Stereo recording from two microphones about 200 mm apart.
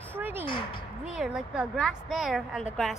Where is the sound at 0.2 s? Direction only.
10° right (ahead or behind).